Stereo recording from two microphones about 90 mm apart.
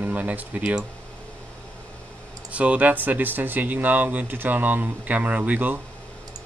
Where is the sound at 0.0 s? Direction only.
20° right (ahead or behind).